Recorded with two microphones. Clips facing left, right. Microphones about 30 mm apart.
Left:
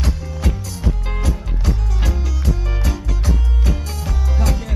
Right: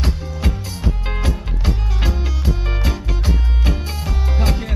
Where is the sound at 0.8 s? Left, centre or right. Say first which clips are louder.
Even; right.